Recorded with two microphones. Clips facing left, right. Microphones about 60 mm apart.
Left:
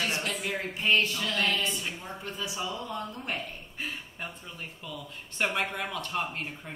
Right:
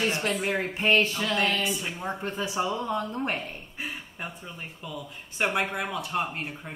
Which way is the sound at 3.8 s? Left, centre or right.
Centre.